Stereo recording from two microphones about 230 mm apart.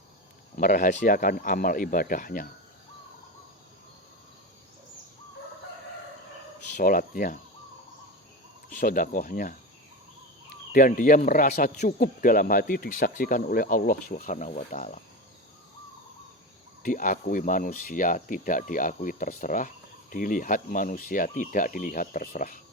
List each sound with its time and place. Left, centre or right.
0.5 s speech: left
6.7 s speech: left
8.8 s speech: left
10.7 s speech: left
16.8 s speech: left